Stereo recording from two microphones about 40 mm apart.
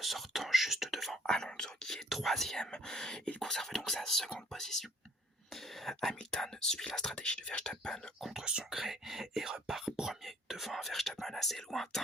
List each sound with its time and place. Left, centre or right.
0.0 s speech: centre
1.3 s whispering: centre
2.0 s whispering: centre
2.6 s a sound: centre
3.4 s whispering: centre
7.2 s whispering: left
8.2 s whispering: centre